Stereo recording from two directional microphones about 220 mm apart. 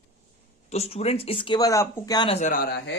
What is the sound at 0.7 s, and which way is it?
Speech, 30° left (ahead or behind).